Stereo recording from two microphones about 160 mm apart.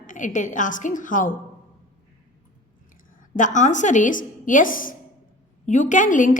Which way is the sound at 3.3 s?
50° left (ahead or behind).